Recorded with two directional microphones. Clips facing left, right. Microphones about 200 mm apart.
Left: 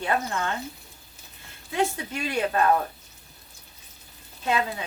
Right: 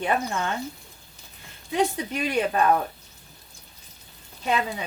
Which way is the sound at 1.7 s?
15° right (ahead or behind).